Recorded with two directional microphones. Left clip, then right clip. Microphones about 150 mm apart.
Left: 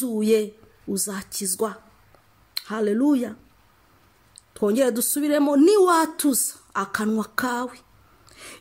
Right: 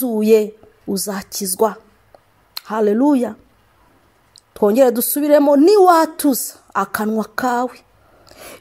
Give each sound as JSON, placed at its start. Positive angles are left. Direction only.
{"t": 0.0, "sound": "a woman's voice", "side_deg": -25}
{"t": 4.6, "sound": "a woman's voice", "side_deg": -25}
{"t": 8.3, "sound": "a sound", "side_deg": -25}